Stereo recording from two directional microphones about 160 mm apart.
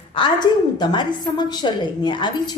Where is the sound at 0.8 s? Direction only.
30° left (ahead or behind).